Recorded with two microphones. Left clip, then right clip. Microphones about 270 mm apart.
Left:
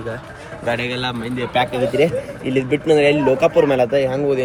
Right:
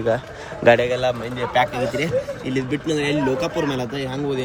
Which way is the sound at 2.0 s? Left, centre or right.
Centre.